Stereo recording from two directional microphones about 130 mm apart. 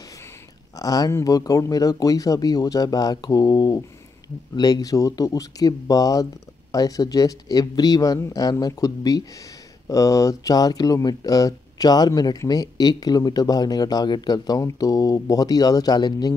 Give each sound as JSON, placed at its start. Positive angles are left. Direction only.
{"t": 0.7, "sound": "speech", "side_deg": 30}